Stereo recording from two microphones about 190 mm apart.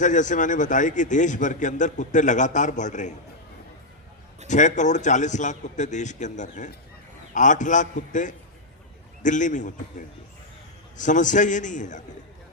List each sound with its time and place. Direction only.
0.0 s a man's voice: 40° left (ahead or behind)
4.4 s a man's voice: 40° left (ahead or behind)
10.9 s a man's voice: 40° left (ahead or behind)